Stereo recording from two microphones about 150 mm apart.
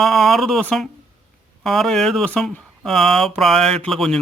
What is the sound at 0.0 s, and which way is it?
Speech, centre (ahead or behind).